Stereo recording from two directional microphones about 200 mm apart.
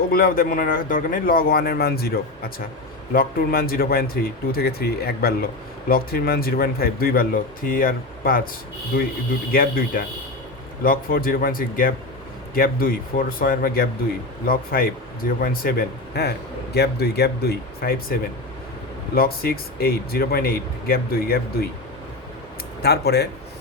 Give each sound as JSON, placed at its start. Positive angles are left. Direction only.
{"t": 0.1, "sound": "speech", "side_deg": 45}
{"t": 9.5, "sound": "speech", "side_deg": 45}
{"t": 19.1, "sound": "speech", "side_deg": 50}
{"t": 22.8, "sound": "speech", "side_deg": 55}